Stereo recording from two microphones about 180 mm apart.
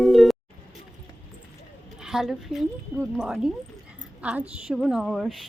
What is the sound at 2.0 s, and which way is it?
A woman's voice, 5° right (ahead or behind).